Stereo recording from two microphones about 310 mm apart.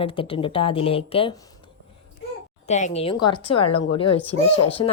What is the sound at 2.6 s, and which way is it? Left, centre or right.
A woman's voice, left.